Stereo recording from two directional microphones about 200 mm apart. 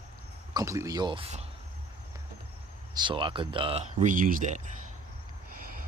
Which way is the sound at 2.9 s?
25° right (ahead or behind).